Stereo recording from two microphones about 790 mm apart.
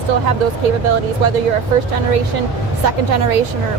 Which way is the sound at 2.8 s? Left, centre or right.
Right.